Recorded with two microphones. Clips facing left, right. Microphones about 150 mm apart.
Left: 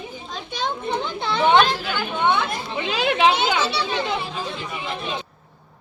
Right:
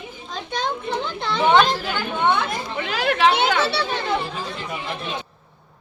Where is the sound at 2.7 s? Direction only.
20° left (ahead or behind).